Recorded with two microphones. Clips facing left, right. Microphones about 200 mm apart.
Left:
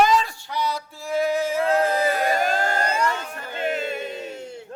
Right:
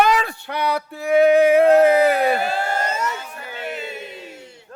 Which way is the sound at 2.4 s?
40° left (ahead or behind).